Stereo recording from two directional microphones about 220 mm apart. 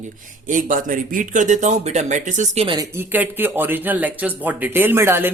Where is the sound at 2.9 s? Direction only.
10° right (ahead or behind).